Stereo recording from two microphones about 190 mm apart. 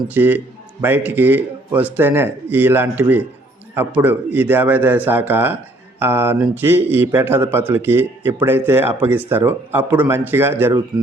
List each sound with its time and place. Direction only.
0.1 s a man's voice: 10° right (ahead or behind)